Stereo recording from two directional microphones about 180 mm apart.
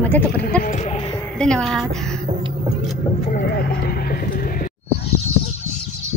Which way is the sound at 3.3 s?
60° left (ahead or behind).